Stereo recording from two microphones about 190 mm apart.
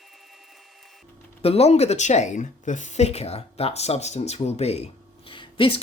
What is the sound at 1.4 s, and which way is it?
Speech, 30° left (ahead or behind).